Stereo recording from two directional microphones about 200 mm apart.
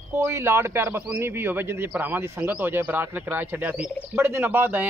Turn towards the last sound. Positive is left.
turn(degrees=-10)  # may be behind; listen again after turning